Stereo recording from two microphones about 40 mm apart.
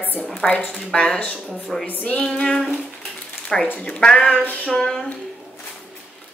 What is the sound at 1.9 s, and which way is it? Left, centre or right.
Music, left.